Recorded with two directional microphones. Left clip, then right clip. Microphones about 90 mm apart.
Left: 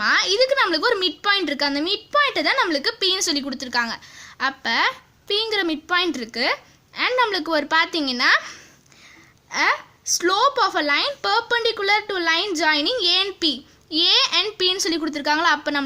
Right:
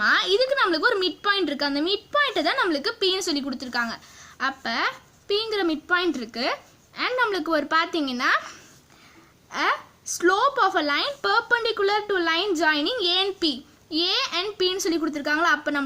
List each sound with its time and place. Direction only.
0.0 s a woman's voice: 25° left (ahead or behind)
9.5 s speech: 20° left (ahead or behind)